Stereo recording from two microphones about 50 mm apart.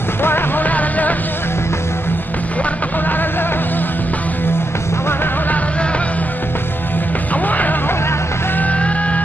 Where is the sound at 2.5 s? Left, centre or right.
Left.